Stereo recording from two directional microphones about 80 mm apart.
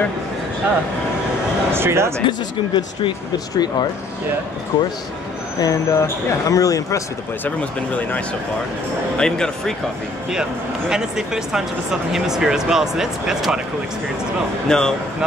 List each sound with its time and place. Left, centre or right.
1.7 s speech: right
2.2 s speech: left
4.7 s speech: left
5.6 s speech: left
7.4 s speech: left
9.2 s speech: centre
10.9 s speech: centre
14.7 s speech: centre